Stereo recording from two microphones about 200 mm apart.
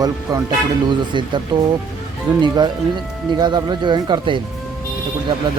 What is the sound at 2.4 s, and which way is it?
Speech, 20° right (ahead or behind).